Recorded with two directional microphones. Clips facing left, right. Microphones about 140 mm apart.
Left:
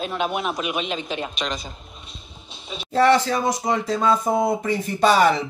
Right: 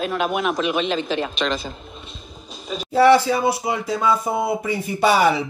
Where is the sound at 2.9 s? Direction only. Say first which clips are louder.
Right 3 dB; 10° right (ahead or behind).